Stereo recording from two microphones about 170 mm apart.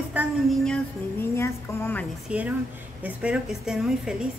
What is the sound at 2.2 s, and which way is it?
Speech, 10° right (ahead or behind).